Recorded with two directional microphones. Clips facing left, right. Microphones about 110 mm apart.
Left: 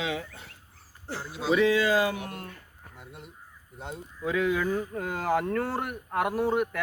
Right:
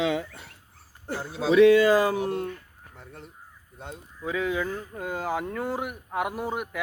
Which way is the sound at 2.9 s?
10° left (ahead or behind).